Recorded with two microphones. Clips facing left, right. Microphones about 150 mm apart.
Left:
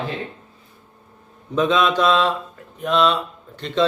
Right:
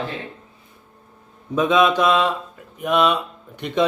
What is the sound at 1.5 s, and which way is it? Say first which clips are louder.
Speech: right 1 dB; 10° right (ahead or behind).